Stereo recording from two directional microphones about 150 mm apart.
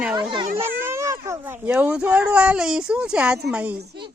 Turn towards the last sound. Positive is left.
turn(degrees=-10)  # may be behind; listen again after turning